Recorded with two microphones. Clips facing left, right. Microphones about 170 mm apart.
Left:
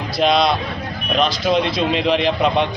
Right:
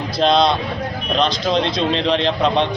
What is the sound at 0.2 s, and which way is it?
A man's voice, 5° left (ahead or behind).